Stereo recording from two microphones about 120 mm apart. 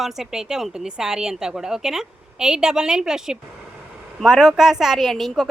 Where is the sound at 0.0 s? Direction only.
5° right (ahead or behind).